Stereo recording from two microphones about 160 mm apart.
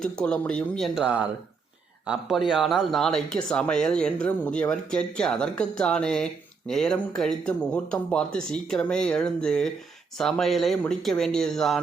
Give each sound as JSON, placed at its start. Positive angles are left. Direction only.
{"t": 0.0, "sound": "speech", "side_deg": 5}